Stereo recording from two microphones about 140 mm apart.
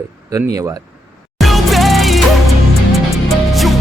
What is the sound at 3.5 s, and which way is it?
Music, centre (ahead or behind).